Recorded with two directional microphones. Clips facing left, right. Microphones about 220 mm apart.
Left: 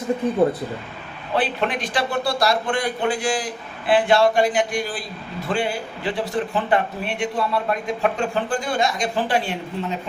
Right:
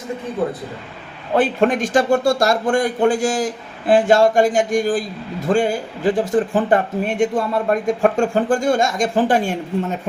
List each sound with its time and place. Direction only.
1.4 s a man's voice: 45° right (ahead or behind)